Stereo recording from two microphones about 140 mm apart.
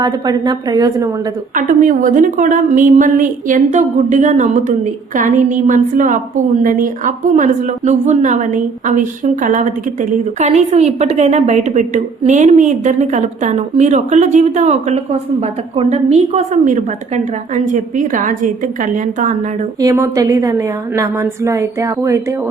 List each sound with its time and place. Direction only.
0.0 s a woman's voice: 30° right (ahead or behind)
1.5 s a woman's voice: 70° right (ahead or behind)
19.8 s a woman's voice: 20° right (ahead or behind)